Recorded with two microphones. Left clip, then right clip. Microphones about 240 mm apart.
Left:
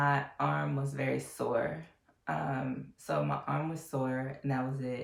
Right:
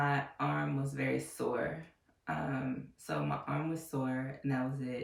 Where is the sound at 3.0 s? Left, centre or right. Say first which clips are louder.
Left 4 dB; centre.